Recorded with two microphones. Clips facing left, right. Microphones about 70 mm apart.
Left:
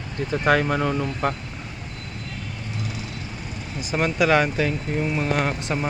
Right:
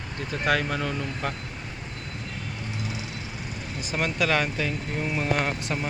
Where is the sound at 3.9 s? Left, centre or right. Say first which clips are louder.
Left 6 dB; centre.